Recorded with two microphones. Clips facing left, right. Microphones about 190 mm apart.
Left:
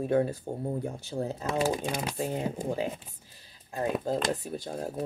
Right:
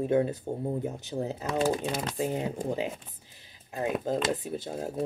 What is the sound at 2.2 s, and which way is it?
Speech, 20° right (ahead or behind).